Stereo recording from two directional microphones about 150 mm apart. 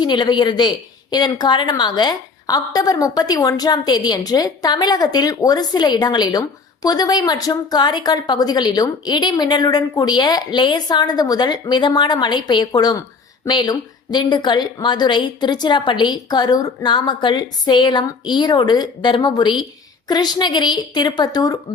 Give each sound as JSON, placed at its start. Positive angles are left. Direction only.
{"t": 0.0, "sound": "a woman's voice", "side_deg": 30}